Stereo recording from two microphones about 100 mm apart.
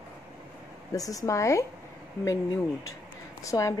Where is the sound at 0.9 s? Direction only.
35° left (ahead or behind).